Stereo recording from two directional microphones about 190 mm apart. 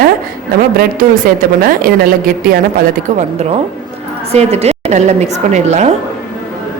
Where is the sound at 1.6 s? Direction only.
50° right (ahead or behind).